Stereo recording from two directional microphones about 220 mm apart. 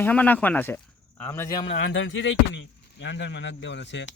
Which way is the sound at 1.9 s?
60° left (ahead or behind).